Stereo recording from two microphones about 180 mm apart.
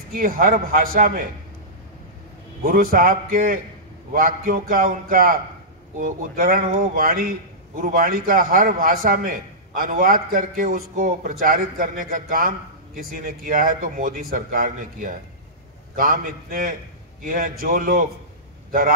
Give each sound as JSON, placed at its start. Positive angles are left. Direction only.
{"t": 0.1, "sound": "a man's voice", "side_deg": -55}
{"t": 2.6, "sound": "a man's voice", "side_deg": -50}